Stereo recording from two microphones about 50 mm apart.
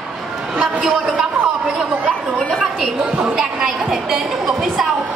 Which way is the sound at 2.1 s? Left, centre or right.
Centre.